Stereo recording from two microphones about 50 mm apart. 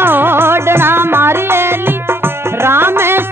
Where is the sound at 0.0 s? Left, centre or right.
Right.